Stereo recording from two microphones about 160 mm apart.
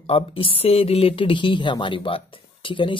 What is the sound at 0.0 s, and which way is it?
Speech, 35° left (ahead or behind).